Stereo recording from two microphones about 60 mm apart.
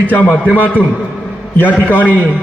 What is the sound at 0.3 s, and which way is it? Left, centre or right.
Speech, right.